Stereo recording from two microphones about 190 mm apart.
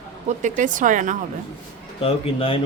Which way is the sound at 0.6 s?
45° right (ahead or behind).